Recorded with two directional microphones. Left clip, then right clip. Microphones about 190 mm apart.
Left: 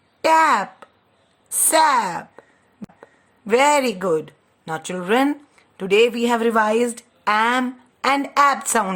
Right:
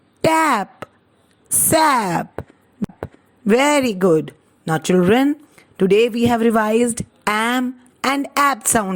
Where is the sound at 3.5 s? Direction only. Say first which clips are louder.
Right 1 dB; 30° right (ahead or behind).